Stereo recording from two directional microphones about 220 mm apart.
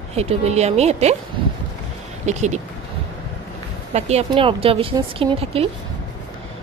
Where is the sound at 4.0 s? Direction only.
30° right (ahead or behind).